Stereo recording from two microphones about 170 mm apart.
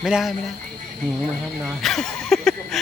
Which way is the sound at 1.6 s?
Centre (ahead or behind).